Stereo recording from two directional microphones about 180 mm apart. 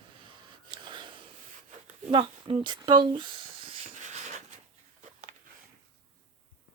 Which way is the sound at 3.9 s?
40° right (ahead or behind).